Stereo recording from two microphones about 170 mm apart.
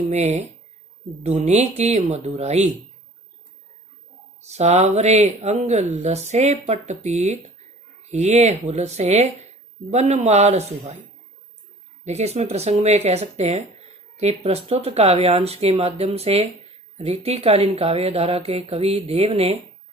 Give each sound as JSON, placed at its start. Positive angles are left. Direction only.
{"t": 0.1, "sound": "speech", "side_deg": -40}
{"t": 4.4, "sound": "speech", "side_deg": -40}
{"t": 12.0, "sound": "speech", "side_deg": -40}